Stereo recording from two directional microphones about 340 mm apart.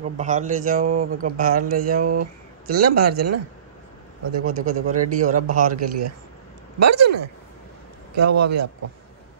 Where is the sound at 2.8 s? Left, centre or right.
Right.